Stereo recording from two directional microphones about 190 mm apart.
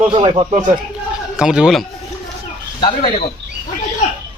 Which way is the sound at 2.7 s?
25° left (ahead or behind).